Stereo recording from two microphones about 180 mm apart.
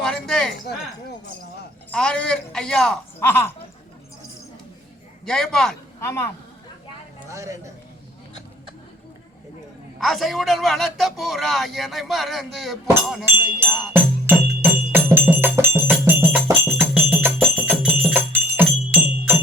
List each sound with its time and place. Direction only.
0.0 s a sound: 5° left (ahead or behind)
1.9 s a man's voice: 5° left (ahead or behind)
5.2 s a man's voice: 5° left (ahead or behind)
6.0 s speech: 15° left (ahead or behind)
7.3 s speech: 15° right (ahead or behind)
10.0 s a man's voice: centre (ahead or behind)
13.2 s music: 10° right (ahead or behind)